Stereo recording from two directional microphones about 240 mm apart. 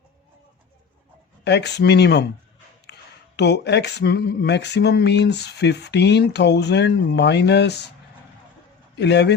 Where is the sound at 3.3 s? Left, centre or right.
Left.